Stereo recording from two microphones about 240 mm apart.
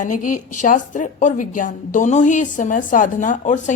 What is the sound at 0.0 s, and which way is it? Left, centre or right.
Speech, left.